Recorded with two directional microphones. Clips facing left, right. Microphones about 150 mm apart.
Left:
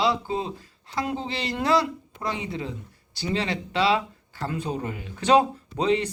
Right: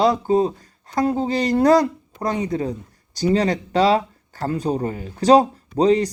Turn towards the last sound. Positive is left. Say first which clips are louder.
# right 7 dB
turn(degrees=-40)  # may be behind; listen again after turning